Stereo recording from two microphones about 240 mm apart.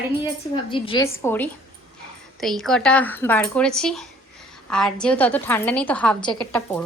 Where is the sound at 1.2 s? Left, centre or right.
Centre.